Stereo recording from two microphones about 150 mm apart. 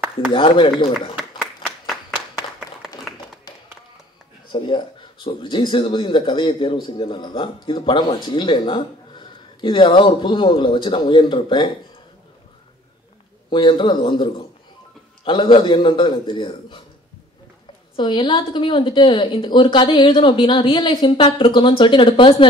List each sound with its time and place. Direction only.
0.3 s speech: 35° left (ahead or behind)
4.5 s speech: 35° left (ahead or behind)
13.5 s speech: 30° left (ahead or behind)
17.9 s speech: 30° left (ahead or behind)